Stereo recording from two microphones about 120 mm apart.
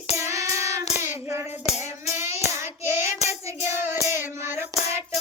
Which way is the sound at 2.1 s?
20° right (ahead or behind).